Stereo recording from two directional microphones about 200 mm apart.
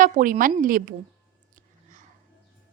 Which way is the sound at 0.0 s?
45° right (ahead or behind).